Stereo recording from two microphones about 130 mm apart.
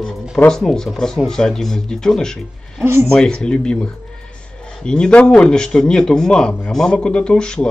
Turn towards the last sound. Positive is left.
turn(degrees=5)  # may be behind; listen again after turning